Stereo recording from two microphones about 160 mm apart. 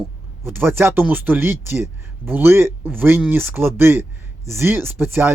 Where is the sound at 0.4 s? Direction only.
15° right (ahead or behind).